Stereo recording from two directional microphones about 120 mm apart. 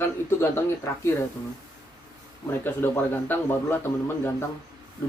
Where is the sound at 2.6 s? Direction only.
15° left (ahead or behind).